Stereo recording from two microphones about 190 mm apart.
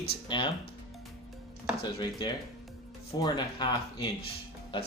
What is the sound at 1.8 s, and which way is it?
Speech, 25° left (ahead or behind).